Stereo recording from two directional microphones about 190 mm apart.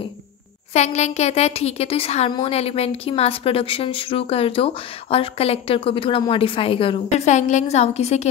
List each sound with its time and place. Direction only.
0.7 s a woman's voice: 35° left (ahead or behind)